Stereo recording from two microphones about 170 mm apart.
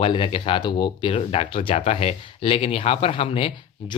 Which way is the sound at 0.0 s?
30° left (ahead or behind).